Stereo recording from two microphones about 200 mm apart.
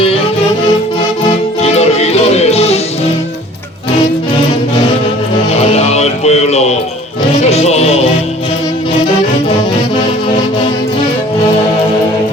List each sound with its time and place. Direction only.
1.6 s music: 30° left (ahead or behind)
5.5 s music: 30° left (ahead or behind)